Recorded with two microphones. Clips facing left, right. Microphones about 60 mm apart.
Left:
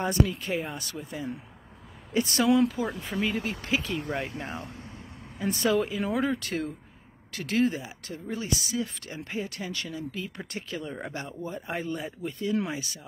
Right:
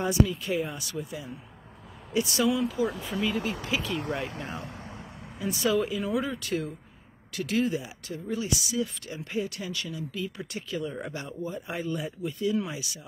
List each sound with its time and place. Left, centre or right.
0.0 s speech: left
0.5 s speech: left
4.1 s speech: centre
5.4 s speech: left
10.9 s speech: left